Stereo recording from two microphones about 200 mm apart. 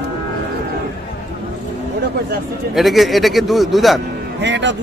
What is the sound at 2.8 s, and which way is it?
A man's voice, centre (ahead or behind).